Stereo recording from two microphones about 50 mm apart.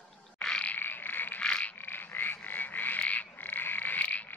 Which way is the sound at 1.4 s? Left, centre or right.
Left.